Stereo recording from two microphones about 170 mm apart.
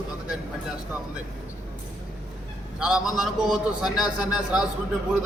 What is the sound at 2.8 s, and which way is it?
A man's voice, 5° right (ahead or behind).